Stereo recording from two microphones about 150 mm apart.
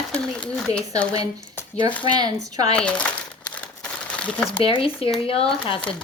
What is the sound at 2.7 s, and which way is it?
Crumpling, 5° left (ahead or behind).